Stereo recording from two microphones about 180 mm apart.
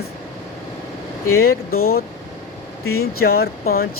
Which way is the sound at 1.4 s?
55° left (ahead or behind).